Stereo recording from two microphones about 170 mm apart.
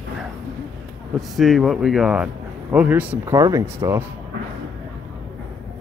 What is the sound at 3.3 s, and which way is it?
Speech, 20° right (ahead or behind).